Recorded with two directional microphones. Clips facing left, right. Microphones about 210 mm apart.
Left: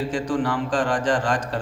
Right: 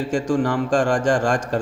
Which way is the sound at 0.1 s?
45° right (ahead or behind).